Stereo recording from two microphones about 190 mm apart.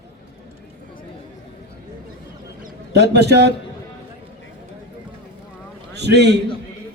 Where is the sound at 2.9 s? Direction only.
60° right (ahead or behind).